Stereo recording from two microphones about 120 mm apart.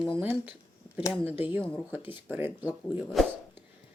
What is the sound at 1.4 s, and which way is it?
Speech, 15° right (ahead or behind).